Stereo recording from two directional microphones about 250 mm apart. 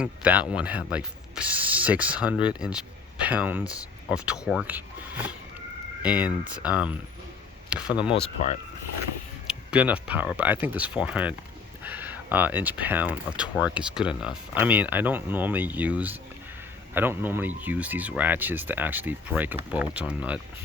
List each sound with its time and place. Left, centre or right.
0.0 s speech: centre
8.1 s speech: left
9.5 s speech: centre